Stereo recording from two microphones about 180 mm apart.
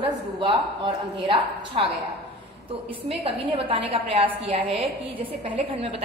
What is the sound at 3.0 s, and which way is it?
A woman's voice, 30° right (ahead or behind).